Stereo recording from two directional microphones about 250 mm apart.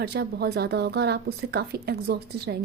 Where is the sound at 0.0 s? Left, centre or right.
Right.